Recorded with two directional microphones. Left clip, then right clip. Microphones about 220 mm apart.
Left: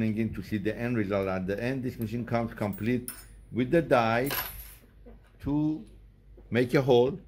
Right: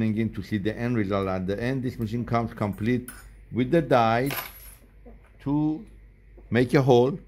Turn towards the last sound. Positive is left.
turn(degrees=-45)  # may be behind; listen again after turning